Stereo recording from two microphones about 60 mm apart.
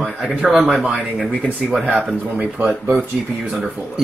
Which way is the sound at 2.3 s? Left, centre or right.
Right.